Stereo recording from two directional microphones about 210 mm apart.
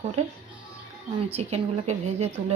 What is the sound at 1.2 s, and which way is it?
Speech, 30° right (ahead or behind).